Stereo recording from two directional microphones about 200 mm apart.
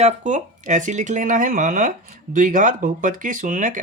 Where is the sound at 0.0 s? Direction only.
35° right (ahead or behind).